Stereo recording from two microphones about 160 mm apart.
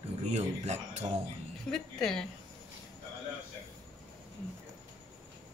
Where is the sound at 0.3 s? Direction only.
45° right (ahead or behind).